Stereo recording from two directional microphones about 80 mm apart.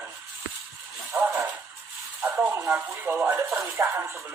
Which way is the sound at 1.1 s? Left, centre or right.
Right.